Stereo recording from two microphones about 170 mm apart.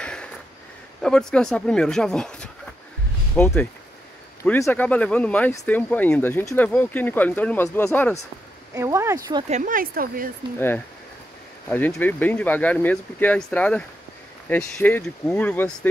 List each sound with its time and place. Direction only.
0.0 s a sound: 5° left (ahead or behind)
1.0 s speech: 5° left (ahead or behind)
8.7 s speech: 20° right (ahead or behind)
9.5 s speech: 50° right (ahead or behind)
11.7 s speech: 10° left (ahead or behind)